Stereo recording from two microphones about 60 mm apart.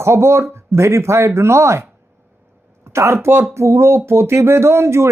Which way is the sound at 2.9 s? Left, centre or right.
Right.